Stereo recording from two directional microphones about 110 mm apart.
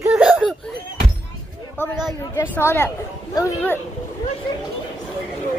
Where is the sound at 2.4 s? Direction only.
20° left (ahead or behind).